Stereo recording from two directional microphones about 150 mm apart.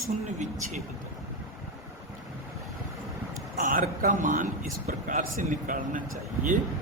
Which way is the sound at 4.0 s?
60° right (ahead or behind).